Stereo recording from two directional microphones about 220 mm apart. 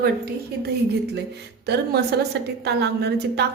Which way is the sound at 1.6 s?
50° right (ahead or behind).